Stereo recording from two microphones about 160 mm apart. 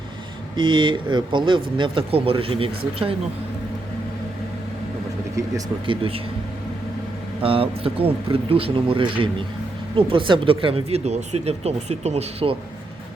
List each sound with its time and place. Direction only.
0.5 s speech: 30° right (ahead or behind)
5.5 s speech: 30° right (ahead or behind)
7.4 s speech: 35° right (ahead or behind)